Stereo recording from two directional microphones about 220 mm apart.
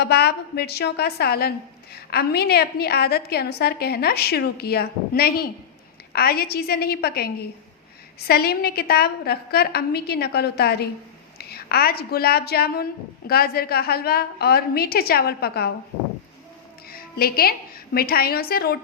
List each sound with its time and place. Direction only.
0.0 s a woman's voice: 45° left (ahead or behind)
8.3 s a woman's voice: 45° left (ahead or behind)
16.9 s music: 40° left (ahead or behind)
17.9 s a woman's voice: 45° left (ahead or behind)